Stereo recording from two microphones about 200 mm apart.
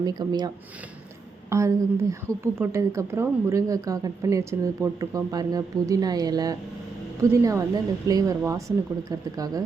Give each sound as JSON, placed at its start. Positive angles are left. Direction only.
{"t": 0.0, "sound": "a woman's voice", "side_deg": -20}